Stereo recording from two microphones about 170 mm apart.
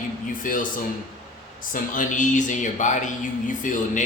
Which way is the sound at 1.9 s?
50° left (ahead or behind).